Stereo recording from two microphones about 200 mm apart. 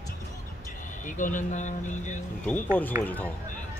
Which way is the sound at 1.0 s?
40° left (ahead or behind).